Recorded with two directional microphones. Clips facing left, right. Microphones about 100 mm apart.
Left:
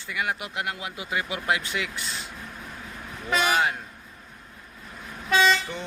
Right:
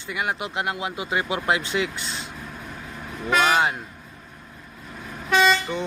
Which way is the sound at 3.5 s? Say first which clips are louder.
Right 3 dB; 25° right (ahead or behind).